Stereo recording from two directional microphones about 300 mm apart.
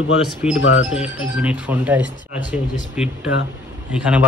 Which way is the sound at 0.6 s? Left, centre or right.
Left.